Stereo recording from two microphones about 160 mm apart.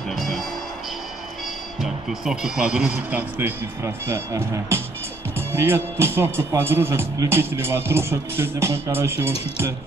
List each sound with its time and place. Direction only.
1.8 s speech: 5° right (ahead or behind)